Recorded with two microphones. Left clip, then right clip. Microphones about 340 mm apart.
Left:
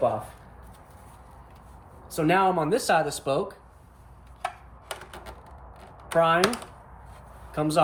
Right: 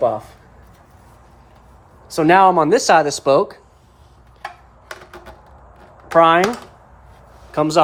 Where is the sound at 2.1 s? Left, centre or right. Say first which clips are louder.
Right 11 dB; centre.